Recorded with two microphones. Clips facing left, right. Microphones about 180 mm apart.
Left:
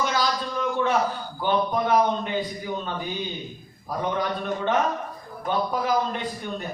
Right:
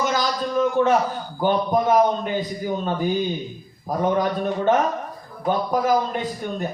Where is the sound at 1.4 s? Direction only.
45° right (ahead or behind).